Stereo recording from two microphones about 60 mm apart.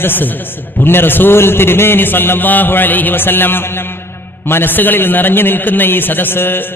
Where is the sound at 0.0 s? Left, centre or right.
Left.